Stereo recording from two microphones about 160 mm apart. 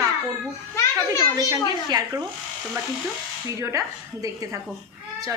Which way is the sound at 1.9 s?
25° right (ahead or behind).